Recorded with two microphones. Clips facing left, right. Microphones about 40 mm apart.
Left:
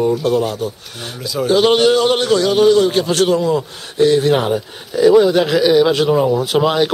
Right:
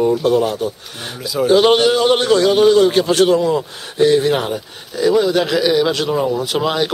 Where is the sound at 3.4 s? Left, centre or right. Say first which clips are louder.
Even; centre.